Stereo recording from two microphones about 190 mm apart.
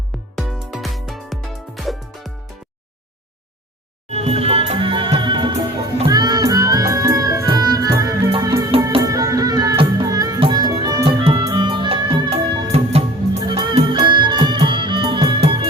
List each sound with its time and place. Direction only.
0.3 s music: centre (ahead or behind)
4.1 s music: 35° right (ahead or behind)